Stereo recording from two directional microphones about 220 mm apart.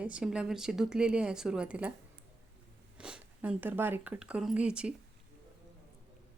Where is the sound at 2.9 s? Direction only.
5° right (ahead or behind).